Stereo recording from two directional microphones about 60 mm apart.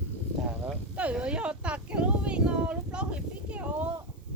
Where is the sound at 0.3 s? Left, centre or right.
Centre.